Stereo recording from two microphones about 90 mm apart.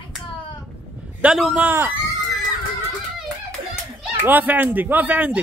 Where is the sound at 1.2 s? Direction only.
15° right (ahead or behind).